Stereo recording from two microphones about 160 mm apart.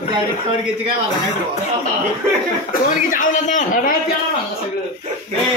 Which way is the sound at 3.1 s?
50° left (ahead or behind).